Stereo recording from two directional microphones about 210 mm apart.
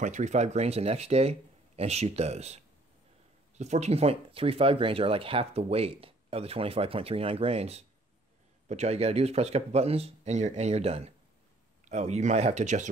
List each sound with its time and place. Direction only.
0.0 s speech: 35° right (ahead or behind)